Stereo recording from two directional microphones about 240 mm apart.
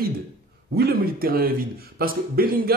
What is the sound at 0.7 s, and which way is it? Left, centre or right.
Speech, right.